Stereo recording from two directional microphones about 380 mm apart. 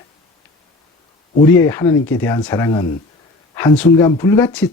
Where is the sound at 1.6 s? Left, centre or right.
Centre.